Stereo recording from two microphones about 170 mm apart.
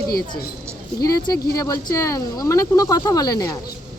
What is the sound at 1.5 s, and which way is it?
Speech, 20° left (ahead or behind).